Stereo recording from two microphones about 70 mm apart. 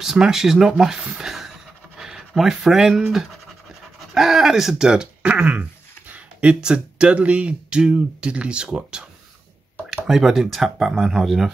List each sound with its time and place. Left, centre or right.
0.0 s speech: centre
1.2 s a sound: centre
2.0 s speech: centre